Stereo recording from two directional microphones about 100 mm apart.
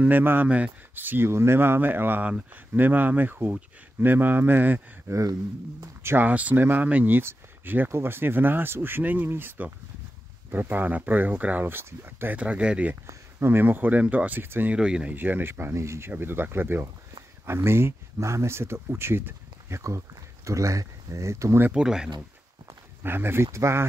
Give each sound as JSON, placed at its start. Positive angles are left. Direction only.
{"t": 0.0, "sound": "speech", "side_deg": -20}
{"t": 5.1, "sound": "speech", "side_deg": -35}
{"t": 6.0, "sound": "speech", "side_deg": -20}
{"t": 13.0, "sound": "speech", "side_deg": -25}
{"t": 14.8, "sound": "speech", "side_deg": -10}
{"t": 15.1, "sound": "speech", "side_deg": -20}
{"t": 21.6, "sound": "speech", "side_deg": -10}
{"t": 23.0, "sound": "speech", "side_deg": -20}